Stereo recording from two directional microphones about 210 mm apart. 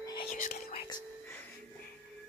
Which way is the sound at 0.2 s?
40° left (ahead or behind).